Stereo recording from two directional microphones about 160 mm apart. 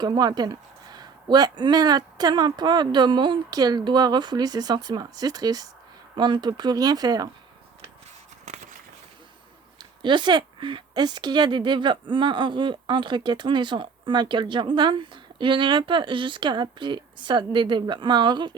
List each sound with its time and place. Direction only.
0.0 s speech: 25° right (ahead or behind)
8.4 s a sound: 50° right (ahead or behind)
10.0 s speech: 30° right (ahead or behind)